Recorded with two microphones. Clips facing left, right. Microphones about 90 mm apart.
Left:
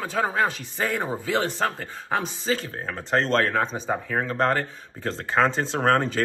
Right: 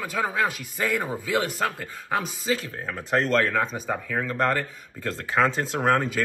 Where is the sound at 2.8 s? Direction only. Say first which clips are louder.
Even; 30° left (ahead or behind).